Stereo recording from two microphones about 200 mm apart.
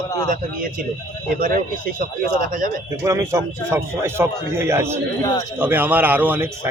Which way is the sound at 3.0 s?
15° right (ahead or behind).